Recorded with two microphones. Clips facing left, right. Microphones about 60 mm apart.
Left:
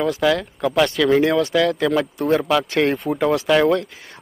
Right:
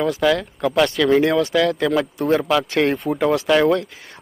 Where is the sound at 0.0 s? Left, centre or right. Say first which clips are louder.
Even; centre.